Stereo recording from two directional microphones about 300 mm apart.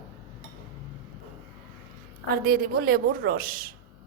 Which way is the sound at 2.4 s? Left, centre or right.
Right.